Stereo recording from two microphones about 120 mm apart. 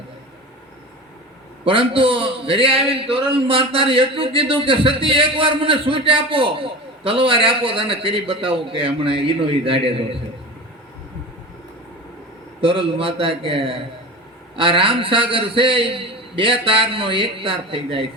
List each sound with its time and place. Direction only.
1.6 s a man's voice: 50° right (ahead or behind)
12.6 s a man's voice: 50° right (ahead or behind)